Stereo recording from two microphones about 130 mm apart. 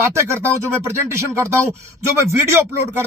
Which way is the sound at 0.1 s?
20° right (ahead or behind).